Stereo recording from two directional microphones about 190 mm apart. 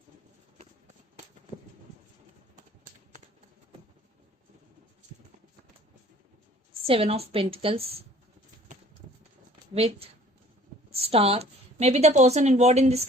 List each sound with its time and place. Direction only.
6.8 s a woman's voice: 30° right (ahead or behind)
9.7 s a woman's voice: 30° right (ahead or behind)